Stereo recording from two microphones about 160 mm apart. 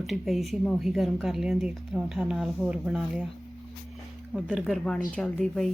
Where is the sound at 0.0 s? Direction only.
Centre (ahead or behind).